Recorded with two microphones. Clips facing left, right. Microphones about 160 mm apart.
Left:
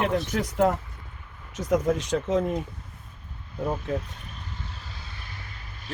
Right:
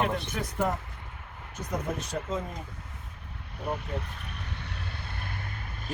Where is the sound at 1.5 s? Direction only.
90° left.